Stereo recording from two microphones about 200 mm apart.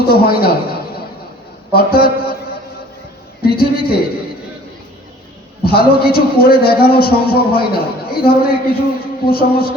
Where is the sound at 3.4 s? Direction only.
50° left (ahead or behind).